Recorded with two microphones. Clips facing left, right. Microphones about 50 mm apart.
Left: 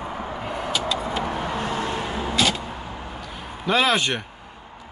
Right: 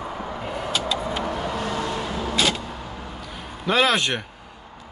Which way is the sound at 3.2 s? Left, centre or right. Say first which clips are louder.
Left 1 dB; centre.